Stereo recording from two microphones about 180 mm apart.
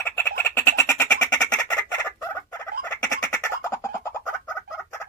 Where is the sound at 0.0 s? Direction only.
15° left (ahead or behind).